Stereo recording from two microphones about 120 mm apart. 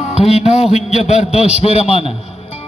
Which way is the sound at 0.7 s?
65° left (ahead or behind).